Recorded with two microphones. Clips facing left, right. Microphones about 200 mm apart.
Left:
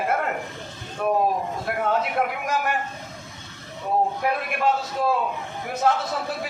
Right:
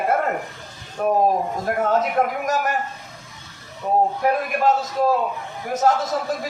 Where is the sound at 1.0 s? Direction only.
40° right (ahead or behind).